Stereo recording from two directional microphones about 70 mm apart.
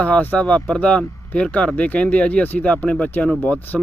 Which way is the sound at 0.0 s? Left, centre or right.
Left.